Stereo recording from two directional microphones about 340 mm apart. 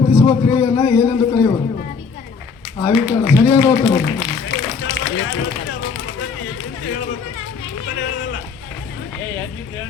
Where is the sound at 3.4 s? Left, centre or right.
Centre.